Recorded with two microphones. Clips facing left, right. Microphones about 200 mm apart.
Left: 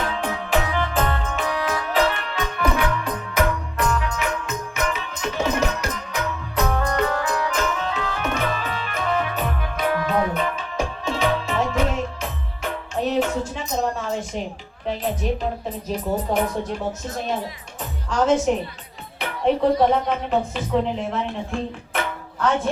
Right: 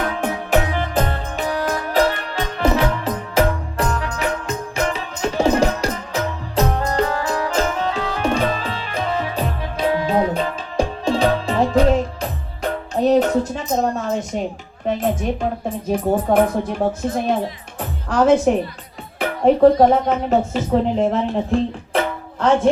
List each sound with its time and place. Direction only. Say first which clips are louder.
0.0 s music: right 3 dB; 45° right (ahead or behind)
2.3 s music: right 4 dB; 30° right (ahead or behind); by 15.4 s 50° right (ahead or behind)
15.9 s speech: right 6 dB; 55° right (ahead or behind)
17.7 s music: right 4 dB; 60° right (ahead or behind)
19.2 s music: right 7 dB; 45° right (ahead or behind)
21.5 s speech: right 9 dB; 35° right (ahead or behind)
21.9 s music: right 6 dB; 30° right (ahead or behind)